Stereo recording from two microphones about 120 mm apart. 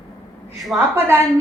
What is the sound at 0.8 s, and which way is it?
Speech, 20° right (ahead or behind).